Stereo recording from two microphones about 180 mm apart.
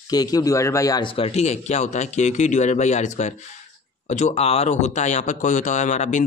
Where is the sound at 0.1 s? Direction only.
20° left (ahead or behind).